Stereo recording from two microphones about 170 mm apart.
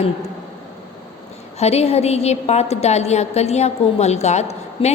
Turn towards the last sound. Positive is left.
turn(degrees=40)  # may be behind; listen again after turning